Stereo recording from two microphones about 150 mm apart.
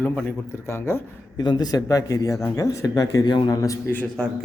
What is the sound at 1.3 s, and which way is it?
Speech, 30° left (ahead or behind).